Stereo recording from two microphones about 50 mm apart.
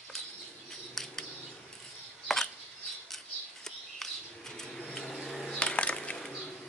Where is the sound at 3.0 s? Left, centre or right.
Centre.